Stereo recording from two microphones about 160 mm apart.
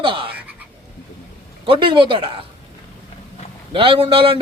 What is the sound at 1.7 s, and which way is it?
Speech, 30° right (ahead or behind).